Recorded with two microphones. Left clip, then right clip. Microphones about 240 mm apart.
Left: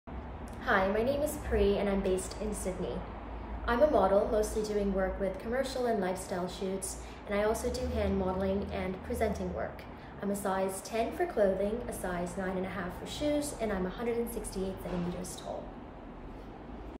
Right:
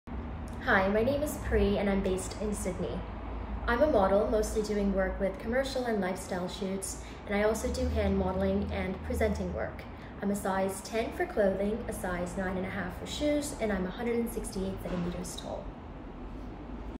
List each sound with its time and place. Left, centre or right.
0.7 s a woman's voice: centre